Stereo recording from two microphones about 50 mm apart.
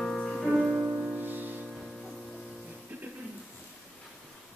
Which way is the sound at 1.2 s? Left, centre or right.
Right.